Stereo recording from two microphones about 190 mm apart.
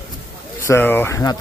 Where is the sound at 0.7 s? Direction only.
10° left (ahead or behind).